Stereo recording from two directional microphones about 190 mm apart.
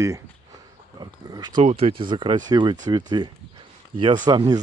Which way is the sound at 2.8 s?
20° right (ahead or behind).